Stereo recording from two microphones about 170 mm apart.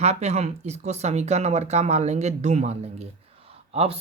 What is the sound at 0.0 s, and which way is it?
Speech, 40° right (ahead or behind).